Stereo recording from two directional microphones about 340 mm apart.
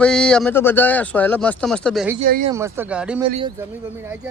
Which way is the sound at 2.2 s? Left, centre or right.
Right.